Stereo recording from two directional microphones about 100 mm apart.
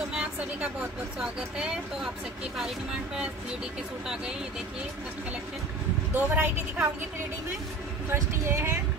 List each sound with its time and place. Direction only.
0.1 s vehicle: 10° right (ahead or behind)
6.1 s speech: 20° right (ahead or behind)
8.1 s speech: 25° right (ahead or behind)